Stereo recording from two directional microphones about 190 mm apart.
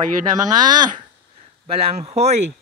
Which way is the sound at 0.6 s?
20° right (ahead or behind).